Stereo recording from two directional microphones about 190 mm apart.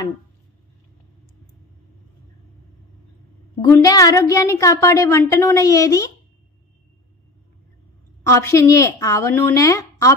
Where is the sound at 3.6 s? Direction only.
15° left (ahead or behind).